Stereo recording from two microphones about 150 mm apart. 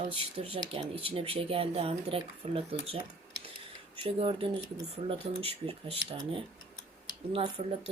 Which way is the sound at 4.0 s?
40° right (ahead or behind).